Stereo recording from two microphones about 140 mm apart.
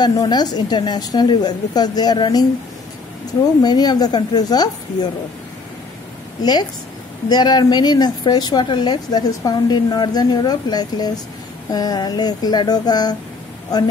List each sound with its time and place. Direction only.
0.0 s speech: 30° left (ahead or behind)
3.6 s speech: 30° left (ahead or behind)
6.4 s speech: 30° left (ahead or behind)